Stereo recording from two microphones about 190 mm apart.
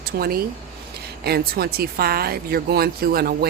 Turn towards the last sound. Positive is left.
turn(degrees=-55)  # may be behind; listen again after turning